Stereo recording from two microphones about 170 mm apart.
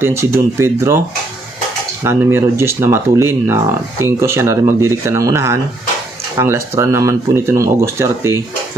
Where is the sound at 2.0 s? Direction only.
15° right (ahead or behind).